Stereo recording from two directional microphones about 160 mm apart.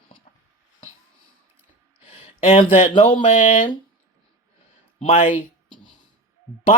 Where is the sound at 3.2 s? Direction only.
35° left (ahead or behind).